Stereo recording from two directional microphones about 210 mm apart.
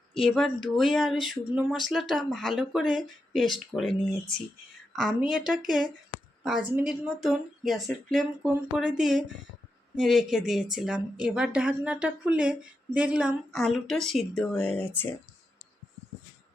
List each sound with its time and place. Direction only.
0.2 s a woman's voice: centre (ahead or behind)
5.5 s a woman's voice: centre (ahead or behind)